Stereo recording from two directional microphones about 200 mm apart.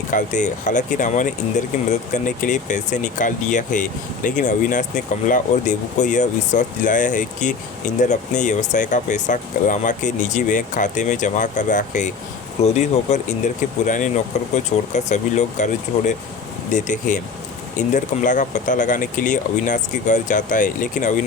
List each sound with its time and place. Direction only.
0.1 s speech: 40° left (ahead or behind)